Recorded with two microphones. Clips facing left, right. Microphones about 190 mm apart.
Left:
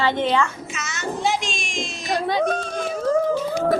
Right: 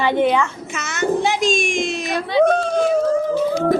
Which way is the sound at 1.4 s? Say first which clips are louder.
Right 11 dB; 50° right (ahead or behind).